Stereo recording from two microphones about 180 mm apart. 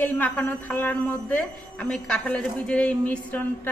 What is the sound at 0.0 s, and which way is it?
Speech, 10° left (ahead or behind).